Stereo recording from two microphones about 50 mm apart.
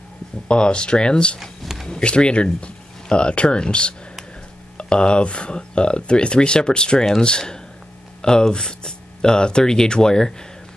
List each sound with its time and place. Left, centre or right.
0.5 s speech: centre
1.4 s a sound: centre
1.9 s speech: left